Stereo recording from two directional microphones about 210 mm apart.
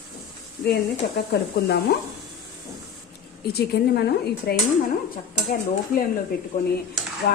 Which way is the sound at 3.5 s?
50° left (ahead or behind).